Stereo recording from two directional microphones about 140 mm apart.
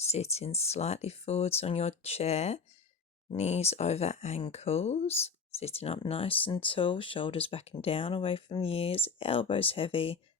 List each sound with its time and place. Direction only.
0.0 s speech: 50° left (ahead or behind)